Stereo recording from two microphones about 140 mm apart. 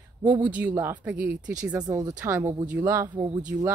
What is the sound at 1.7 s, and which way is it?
Speech, 25° right (ahead or behind).